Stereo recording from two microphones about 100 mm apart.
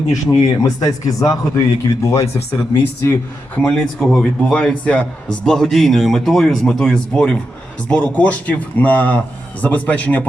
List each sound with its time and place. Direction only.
0.1 s a man's voice: 35° left (ahead or behind); by 3.6 s 20° left (ahead or behind)
3.6 s a man's voice: 10° left (ahead or behind)